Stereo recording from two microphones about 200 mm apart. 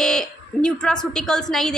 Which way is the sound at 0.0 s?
5° left (ahead or behind).